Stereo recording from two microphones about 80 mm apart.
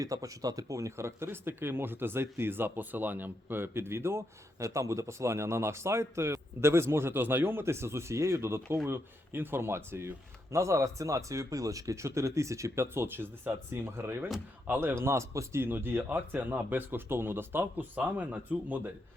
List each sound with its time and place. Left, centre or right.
0.0 s speech: right; by 18.8 s centre